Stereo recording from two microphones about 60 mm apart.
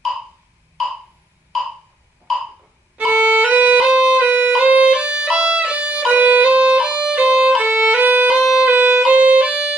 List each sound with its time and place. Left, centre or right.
0.8 s a sound: centre
3.0 s music: right
6.2 s violin: right
8.0 s music: right
8.4 s music: centre
8.6 s violin: right
9.0 s violin: right